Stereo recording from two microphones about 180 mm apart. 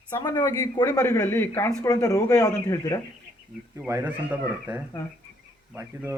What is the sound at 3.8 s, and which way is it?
Speech, 15° right (ahead or behind).